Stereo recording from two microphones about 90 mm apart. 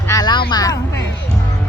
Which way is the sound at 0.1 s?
50° left (ahead or behind).